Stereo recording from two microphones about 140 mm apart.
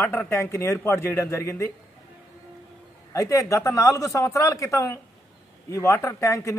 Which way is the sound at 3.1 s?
25° left (ahead or behind).